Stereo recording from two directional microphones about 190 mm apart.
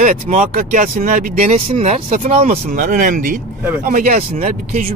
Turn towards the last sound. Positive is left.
turn(degrees=-45)  # may be behind; listen again after turning